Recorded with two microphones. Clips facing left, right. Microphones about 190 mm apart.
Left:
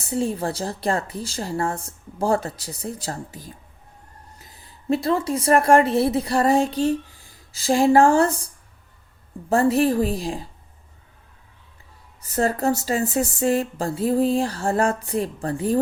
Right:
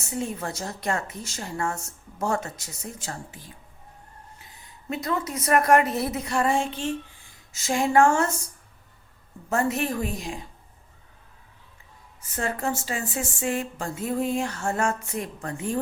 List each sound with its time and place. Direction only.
0.0 s a woman's voice: 30° left (ahead or behind)
9.5 s speech: 35° left (ahead or behind)
12.2 s speech: 35° left (ahead or behind)